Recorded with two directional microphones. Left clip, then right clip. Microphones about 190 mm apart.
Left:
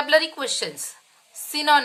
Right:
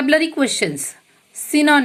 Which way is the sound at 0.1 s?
15° right (ahead or behind).